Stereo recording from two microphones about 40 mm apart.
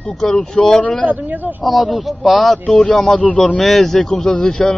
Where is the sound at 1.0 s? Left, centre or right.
Right.